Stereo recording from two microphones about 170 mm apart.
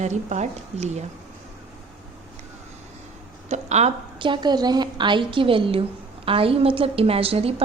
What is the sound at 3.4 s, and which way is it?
A woman's voice, 40° right (ahead or behind).